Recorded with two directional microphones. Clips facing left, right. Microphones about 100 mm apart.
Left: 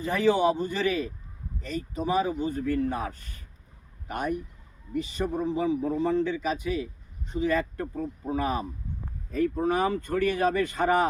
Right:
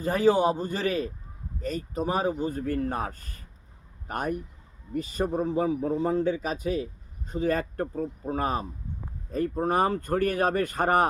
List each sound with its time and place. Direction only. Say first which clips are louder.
0.0 s a man's voice: right 1 dB; 40° right (ahead or behind)